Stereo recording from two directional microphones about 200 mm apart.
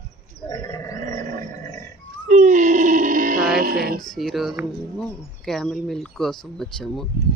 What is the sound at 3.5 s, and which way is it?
Child singing, 45° right (ahead or behind).